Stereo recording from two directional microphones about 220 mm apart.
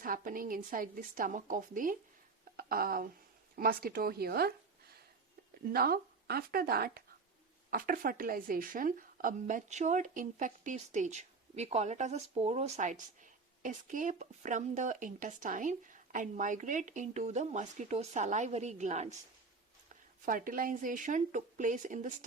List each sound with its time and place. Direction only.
0.0 s a woman's voice: 40° right (ahead or behind)
5.6 s a woman's voice: 45° right (ahead or behind)